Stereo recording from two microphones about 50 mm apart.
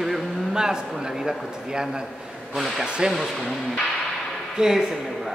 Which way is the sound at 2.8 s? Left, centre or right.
Centre.